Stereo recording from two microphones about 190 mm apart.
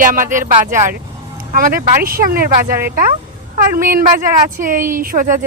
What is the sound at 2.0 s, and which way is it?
Speech, 50° right (ahead or behind).